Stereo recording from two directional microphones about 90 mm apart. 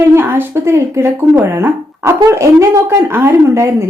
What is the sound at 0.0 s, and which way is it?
Speech, 25° right (ahead or behind).